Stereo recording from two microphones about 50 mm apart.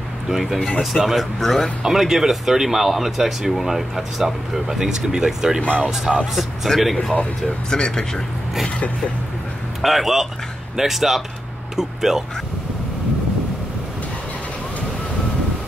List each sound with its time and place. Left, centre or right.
0.3 s speech: centre
0.6 s speech: left
0.9 s speech: centre
1.8 s speech: centre
6.7 s speech: centre
9.8 s speech: centre